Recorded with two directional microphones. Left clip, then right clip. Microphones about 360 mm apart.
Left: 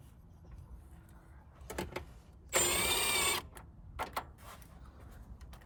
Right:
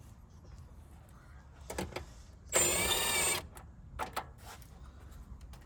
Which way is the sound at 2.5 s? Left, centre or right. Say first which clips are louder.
Right 1 dB; centre.